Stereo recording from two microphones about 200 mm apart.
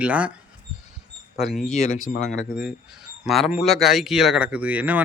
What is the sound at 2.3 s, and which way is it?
Speech, 5° right (ahead or behind).